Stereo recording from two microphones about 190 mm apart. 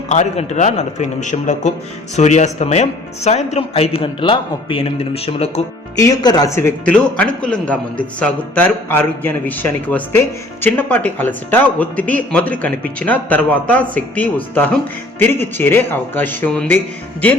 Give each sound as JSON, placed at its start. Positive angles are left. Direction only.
{"t": 0.1, "sound": "speech", "side_deg": 35}
{"t": 6.0, "sound": "speech", "side_deg": 20}